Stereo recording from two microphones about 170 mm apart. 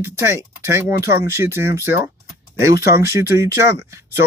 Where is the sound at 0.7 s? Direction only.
15° right (ahead or behind).